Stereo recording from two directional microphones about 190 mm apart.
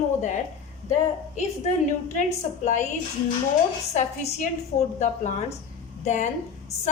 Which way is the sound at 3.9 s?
35° left (ahead or behind).